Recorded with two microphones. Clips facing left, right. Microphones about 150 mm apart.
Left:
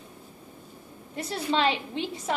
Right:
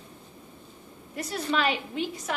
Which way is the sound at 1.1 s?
30° left (ahead or behind).